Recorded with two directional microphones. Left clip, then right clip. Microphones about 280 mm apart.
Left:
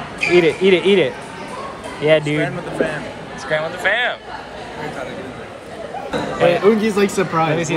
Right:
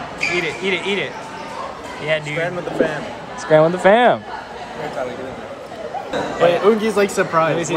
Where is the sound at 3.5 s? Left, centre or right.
Right.